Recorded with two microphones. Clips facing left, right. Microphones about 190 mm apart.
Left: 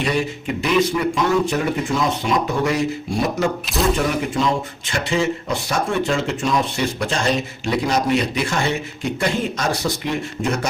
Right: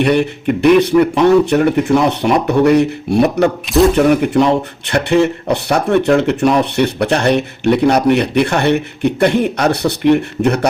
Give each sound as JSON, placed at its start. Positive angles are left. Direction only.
{"t": 0.0, "sound": "speech", "side_deg": -65}